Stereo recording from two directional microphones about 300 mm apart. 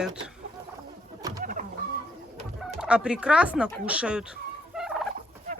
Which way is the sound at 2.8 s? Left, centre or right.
Centre.